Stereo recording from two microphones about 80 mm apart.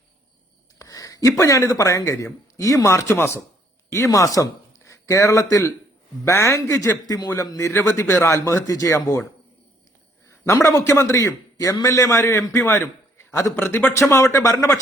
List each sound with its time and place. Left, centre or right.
0.8 s a sound: left
1.4 s a man's voice: left
2.1 s a man's voice: left
4.1 s a man's voice: left
7.7 s a man's voice: left
10.2 s a man's voice: left
14.5 s speech: left